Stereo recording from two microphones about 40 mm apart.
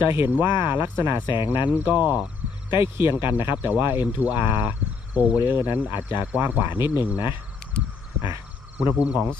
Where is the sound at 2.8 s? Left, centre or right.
Right.